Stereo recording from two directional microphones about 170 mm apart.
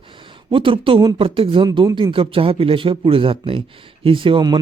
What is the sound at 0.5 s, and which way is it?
Speech, 30° right (ahead or behind).